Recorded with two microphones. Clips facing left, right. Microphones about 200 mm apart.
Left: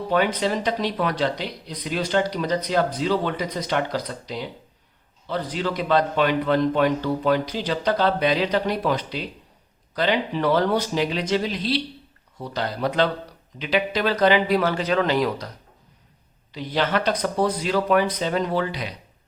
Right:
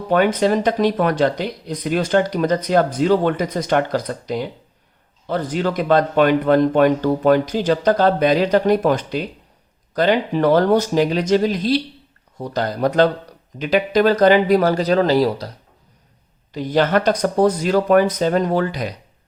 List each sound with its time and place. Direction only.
0.1 s speech: 50° right (ahead or behind)
16.5 s speech: 45° right (ahead or behind)